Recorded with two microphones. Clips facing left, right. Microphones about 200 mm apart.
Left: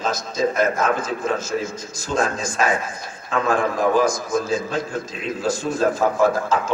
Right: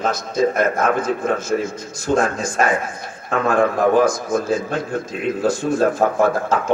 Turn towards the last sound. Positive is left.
turn(degrees=-60)  # may be behind; listen again after turning